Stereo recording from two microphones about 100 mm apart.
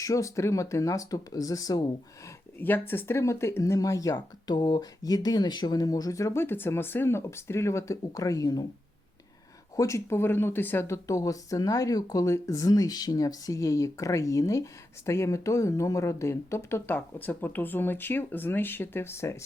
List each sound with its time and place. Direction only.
0.0 s speech: 30° left (ahead or behind)
2.6 s speech: 20° left (ahead or behind); by 4.9 s 55° left (ahead or behind)
5.0 s speech: 40° left (ahead or behind)
9.7 s speech: 30° left (ahead or behind)